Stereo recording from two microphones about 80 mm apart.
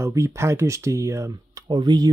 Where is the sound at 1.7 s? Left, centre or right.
Right.